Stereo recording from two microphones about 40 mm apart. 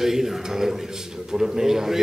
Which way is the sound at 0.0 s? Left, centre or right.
Centre.